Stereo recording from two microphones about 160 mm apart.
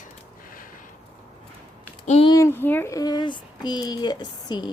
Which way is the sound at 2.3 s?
15° left (ahead or behind).